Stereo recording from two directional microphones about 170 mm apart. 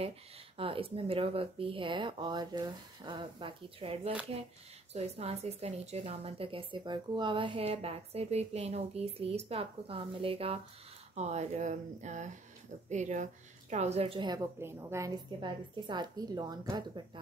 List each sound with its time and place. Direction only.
0.6 s a woman's voice: 35° right (ahead or behind)